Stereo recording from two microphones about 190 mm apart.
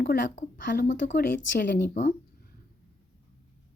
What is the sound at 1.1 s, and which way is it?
Speech, 60° left (ahead or behind).